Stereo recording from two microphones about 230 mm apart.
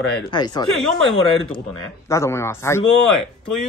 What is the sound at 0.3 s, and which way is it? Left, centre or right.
A man's voice, centre.